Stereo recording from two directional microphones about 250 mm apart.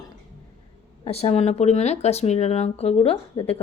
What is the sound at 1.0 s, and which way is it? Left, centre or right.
Speech, left.